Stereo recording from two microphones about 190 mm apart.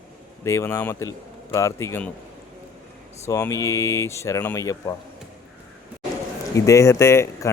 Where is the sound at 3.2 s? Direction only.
15° left (ahead or behind).